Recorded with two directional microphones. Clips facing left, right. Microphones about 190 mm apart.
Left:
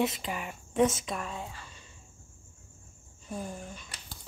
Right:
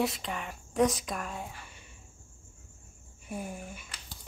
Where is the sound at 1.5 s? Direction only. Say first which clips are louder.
Even; 15° right (ahead or behind).